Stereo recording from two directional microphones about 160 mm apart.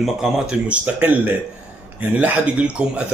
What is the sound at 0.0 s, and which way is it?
Speech, 5° right (ahead or behind).